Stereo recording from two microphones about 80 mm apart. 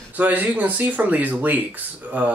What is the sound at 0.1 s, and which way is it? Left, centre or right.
Speech, right.